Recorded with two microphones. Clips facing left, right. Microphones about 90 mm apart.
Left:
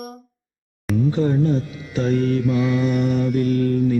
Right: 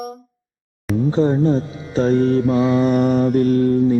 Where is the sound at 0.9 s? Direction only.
30° right (ahead or behind).